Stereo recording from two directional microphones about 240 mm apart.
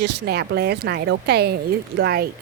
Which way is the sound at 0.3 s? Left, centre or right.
Right.